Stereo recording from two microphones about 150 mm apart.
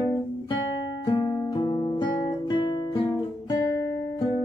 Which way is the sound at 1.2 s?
20° left (ahead or behind).